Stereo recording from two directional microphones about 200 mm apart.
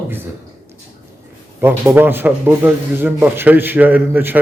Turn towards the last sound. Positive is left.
turn(degrees=-10)  # may be behind; listen again after turning